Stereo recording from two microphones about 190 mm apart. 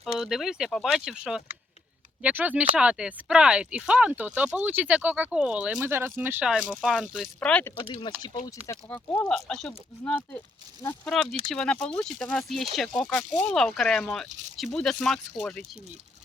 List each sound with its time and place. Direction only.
0.0 s speech: centre (ahead or behind)
7.8 s speech: 25° left (ahead or behind); by 15.6 s 5° left (ahead or behind)